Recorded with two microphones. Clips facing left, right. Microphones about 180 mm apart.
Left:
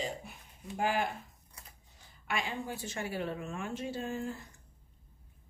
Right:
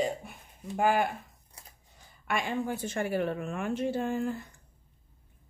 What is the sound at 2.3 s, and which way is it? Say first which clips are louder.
A woman's voice: right 6 dB; 55° right (ahead or behind).